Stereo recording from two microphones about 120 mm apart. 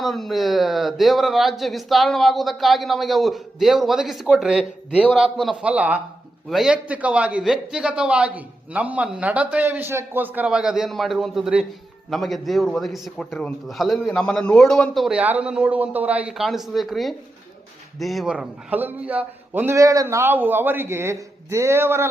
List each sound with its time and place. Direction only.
0.0 s a man's voice: centre (ahead or behind)
15.2 s a man's voice: 10° right (ahead or behind)